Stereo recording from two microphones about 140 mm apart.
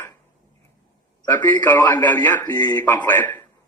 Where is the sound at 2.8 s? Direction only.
15° left (ahead or behind).